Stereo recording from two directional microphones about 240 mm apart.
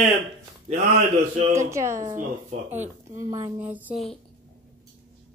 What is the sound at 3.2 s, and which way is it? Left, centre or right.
Speech, centre.